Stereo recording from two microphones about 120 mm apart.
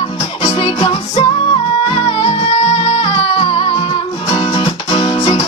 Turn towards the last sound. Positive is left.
turn(degrees=45)  # may be behind; listen again after turning